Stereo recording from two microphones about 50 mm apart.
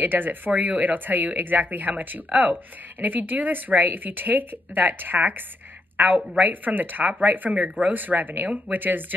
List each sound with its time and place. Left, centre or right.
0.0 s speech: right